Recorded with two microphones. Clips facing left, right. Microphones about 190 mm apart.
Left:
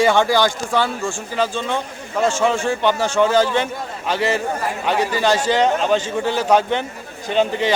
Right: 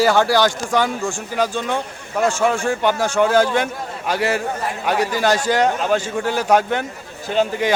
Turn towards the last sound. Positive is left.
turn(degrees=-10)  # may be behind; listen again after turning